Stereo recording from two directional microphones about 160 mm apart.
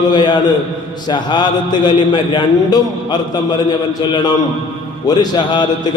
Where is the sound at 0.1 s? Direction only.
30° left (ahead or behind).